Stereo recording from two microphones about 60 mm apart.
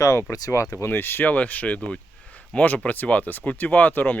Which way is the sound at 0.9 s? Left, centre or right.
Left.